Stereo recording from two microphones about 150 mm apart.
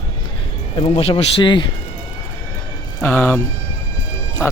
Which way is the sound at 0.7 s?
40° left (ahead or behind).